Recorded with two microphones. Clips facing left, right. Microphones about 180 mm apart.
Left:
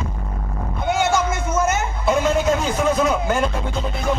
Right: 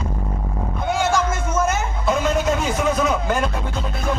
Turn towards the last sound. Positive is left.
turn(degrees=0)  # may be behind; listen again after turning